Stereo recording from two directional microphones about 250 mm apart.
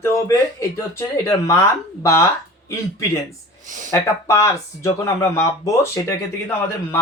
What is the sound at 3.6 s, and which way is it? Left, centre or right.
Speech, right.